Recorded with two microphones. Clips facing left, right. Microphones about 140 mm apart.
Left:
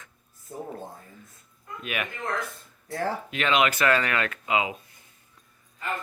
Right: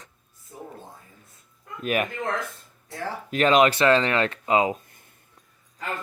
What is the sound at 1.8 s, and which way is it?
Speech, 40° right (ahead or behind).